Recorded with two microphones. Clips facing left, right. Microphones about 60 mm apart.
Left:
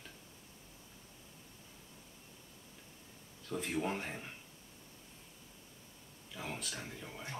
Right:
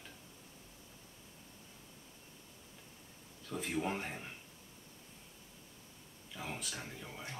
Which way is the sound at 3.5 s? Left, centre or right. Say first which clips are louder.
Left 1 dB; centre.